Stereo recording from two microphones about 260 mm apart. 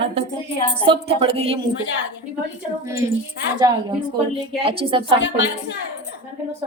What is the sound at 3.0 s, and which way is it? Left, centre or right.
Speech, centre.